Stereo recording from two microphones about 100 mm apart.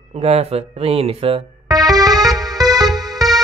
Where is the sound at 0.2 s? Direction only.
85° right.